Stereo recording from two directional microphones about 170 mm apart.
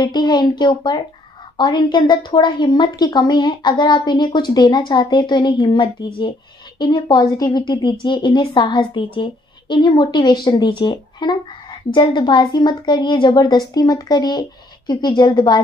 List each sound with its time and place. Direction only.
0.0 s a woman's voice: 25° left (ahead or behind)